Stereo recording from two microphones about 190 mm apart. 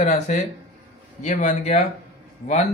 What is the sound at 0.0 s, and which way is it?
Speech, 40° left (ahead or behind).